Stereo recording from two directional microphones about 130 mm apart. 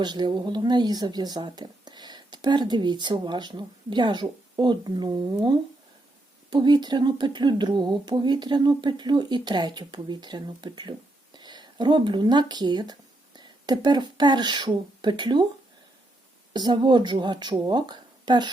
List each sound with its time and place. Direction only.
0.0 s speech: 35° right (ahead or behind)
16.5 s speech: 35° right (ahead or behind)